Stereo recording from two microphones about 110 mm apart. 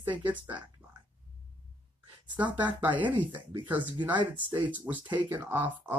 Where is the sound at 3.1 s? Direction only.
45° right (ahead or behind).